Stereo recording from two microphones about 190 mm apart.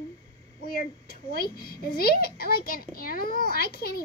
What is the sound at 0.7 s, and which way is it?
A child's voice, 50° left (ahead or behind).